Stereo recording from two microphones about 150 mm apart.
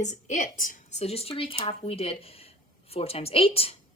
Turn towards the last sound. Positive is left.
turn(degrees=40)  # may be behind; listen again after turning